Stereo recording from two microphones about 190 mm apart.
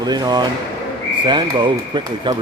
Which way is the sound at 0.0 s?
20° right (ahead or behind).